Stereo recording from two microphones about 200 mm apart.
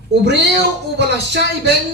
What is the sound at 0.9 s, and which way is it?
Speech, 60° right (ahead or behind).